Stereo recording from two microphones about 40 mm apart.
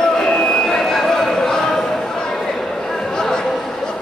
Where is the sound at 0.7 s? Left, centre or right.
Centre.